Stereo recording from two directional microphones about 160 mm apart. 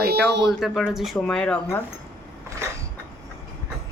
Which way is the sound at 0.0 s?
80° right.